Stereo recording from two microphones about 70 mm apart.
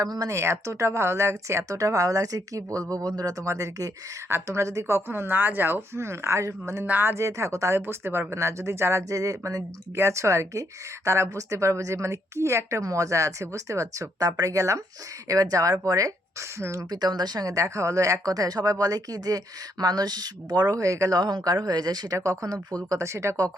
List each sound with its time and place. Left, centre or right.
0.0 s speech: right
0.3 s speech: right
3.4 s speech: right
4.3 s speech: right
6.8 s speech: right
9.9 s speech: right
16.6 s speech: right
16.9 s speech: right
21.2 s speech: right
22.9 s speech: right